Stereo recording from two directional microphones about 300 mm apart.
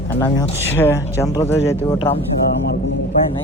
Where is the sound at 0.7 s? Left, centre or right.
Centre.